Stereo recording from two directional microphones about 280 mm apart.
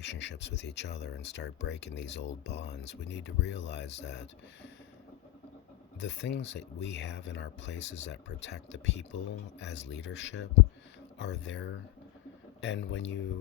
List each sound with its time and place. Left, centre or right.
0.0 s speech: left
6.0 s speech: left